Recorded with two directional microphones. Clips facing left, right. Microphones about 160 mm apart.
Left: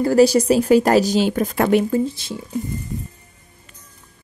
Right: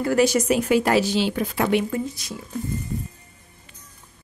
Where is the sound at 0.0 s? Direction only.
35° left (ahead or behind).